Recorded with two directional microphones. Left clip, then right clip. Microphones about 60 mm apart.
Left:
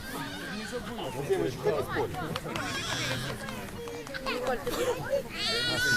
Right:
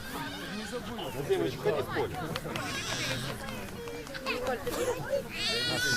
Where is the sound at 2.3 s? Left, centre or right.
Left.